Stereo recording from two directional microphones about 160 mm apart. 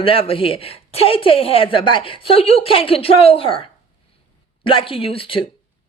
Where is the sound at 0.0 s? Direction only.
35° left (ahead or behind).